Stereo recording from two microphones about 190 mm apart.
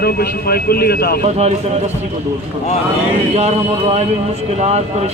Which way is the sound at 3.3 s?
35° right (ahead or behind).